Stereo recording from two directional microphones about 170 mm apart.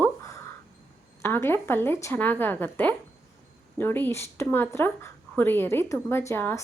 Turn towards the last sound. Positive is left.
turn(degrees=15)  # may be behind; listen again after turning